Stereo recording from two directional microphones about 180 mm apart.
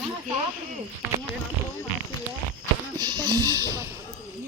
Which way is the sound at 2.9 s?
20° right (ahead or behind).